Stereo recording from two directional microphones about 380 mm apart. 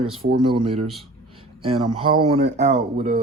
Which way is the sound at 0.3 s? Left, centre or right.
Centre.